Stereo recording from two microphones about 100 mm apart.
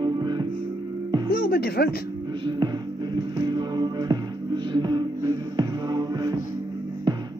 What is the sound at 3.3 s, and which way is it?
Music, 45° right (ahead or behind).